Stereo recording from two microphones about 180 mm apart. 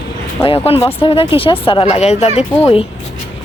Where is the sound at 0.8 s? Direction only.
30° left (ahead or behind).